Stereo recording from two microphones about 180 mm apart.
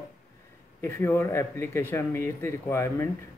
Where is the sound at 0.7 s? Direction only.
15° left (ahead or behind).